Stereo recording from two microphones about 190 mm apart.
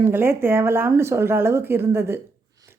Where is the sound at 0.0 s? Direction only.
10° right (ahead or behind).